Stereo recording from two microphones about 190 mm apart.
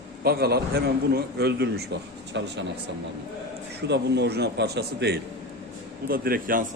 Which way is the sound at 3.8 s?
60° right (ahead or behind).